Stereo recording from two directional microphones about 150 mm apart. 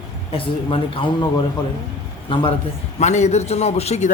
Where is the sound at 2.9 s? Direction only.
50° left (ahead or behind).